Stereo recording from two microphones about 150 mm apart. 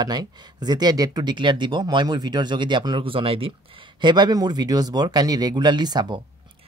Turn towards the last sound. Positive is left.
turn(degrees=-30)  # may be behind; listen again after turning